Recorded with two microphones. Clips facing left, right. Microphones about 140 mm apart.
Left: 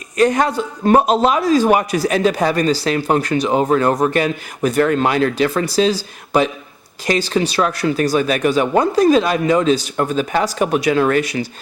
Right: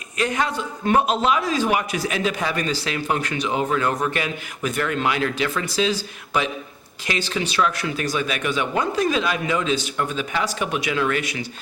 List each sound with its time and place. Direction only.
0.2 s a man's voice: 40° left (ahead or behind)